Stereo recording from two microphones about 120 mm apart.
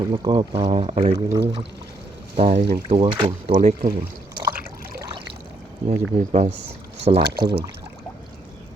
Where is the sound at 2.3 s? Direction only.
55° right (ahead or behind).